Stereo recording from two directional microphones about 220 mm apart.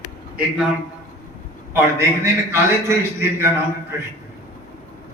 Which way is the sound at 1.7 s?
10° right (ahead or behind).